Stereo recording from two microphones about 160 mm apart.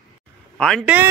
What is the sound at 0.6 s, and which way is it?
Speech, 5° left (ahead or behind).